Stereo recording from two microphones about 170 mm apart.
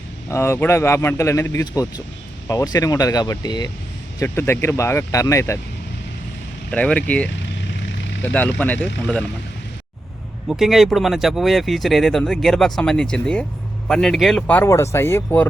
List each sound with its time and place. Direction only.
0.3 s speech: 15° left (ahead or behind)
6.7 s speech: 5° left (ahead or behind)
10.5 s speech: centre (ahead or behind)